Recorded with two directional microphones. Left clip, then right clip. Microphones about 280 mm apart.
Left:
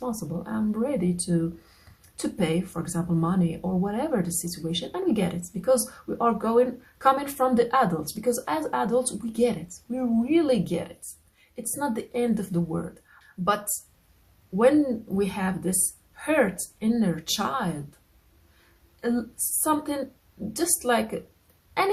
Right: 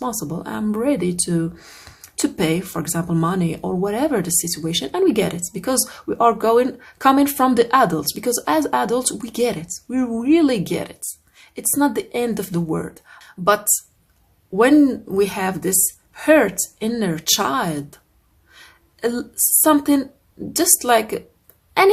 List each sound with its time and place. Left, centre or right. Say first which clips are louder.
0.0 s speech: right 7 dB; right
14.6 s speech: right 6 dB; right
19.6 s speech: right 10 dB; right